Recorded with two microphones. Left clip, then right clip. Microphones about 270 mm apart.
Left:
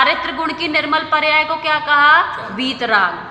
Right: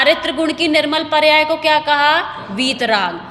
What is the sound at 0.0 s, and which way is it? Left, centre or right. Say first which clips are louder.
A woman's voice: right 1 dB; right.